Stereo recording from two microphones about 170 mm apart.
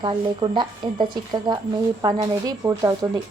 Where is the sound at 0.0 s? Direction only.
25° right (ahead or behind).